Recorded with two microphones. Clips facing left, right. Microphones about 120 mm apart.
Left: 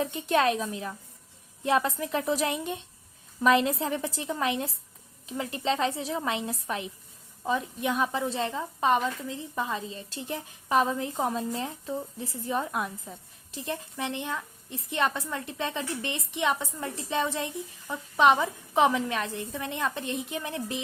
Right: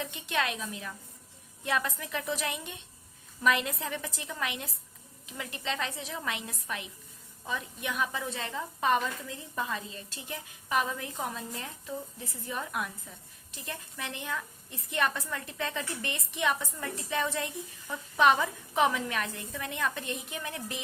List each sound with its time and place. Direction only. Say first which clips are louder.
0.0 s a woman's voice: left 8 dB; 40° left (ahead or behind)